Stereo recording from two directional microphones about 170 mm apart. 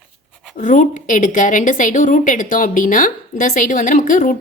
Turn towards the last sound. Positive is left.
turn(degrees=50)  # may be behind; listen again after turning